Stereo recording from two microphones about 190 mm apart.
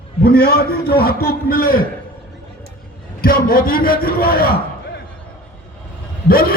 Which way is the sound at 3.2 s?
45° left (ahead or behind).